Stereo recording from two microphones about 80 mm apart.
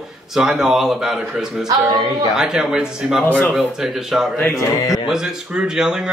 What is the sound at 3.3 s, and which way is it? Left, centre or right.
Speech, left.